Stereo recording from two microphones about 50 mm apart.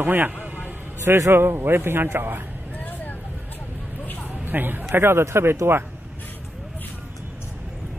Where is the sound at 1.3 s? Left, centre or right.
Right.